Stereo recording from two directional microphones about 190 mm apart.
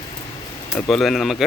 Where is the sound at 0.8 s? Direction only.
Centre (ahead or behind).